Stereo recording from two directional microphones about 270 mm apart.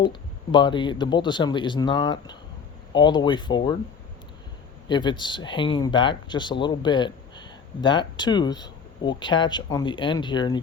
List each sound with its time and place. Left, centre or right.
0.0 s speech: centre
4.9 s speech: centre